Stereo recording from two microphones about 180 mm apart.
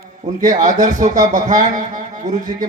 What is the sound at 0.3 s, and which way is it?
A man's voice, 45° right (ahead or behind).